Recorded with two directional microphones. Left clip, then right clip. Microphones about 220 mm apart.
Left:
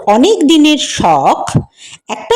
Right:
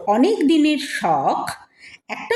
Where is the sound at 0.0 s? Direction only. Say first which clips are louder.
Left 8 dB; 35° left (ahead or behind).